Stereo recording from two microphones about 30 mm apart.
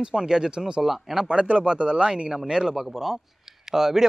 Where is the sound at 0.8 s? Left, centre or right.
Centre.